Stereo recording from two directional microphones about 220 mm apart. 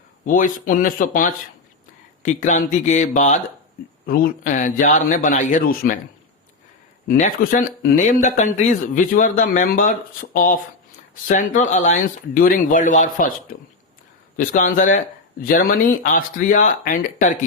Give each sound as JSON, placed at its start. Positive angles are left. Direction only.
{"t": 0.3, "sound": "speech", "side_deg": 35}
{"t": 7.1, "sound": "speech", "side_deg": 40}
{"t": 14.3, "sound": "speech", "side_deg": 40}